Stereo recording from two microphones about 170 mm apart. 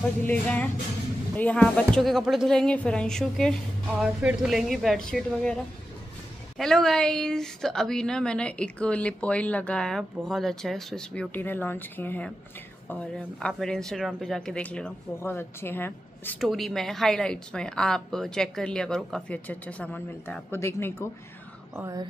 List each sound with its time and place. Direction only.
0.2 s music: 10° left (ahead or behind)
1.3 s a woman's voice: 10° left (ahead or behind)
6.6 s a woman's voice: centre (ahead or behind)
16.3 s a woman's voice: centre (ahead or behind)
21.7 s speech: 15° right (ahead or behind)